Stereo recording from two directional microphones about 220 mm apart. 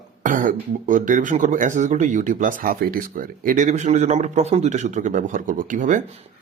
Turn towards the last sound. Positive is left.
turn(degrees=-35)  # may be behind; listen again after turning